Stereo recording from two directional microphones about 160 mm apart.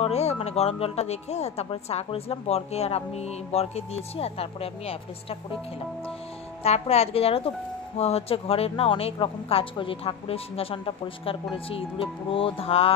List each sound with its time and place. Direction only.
0.0 s speech: 40° left (ahead or behind)
6.6 s speech: 40° left (ahead or behind)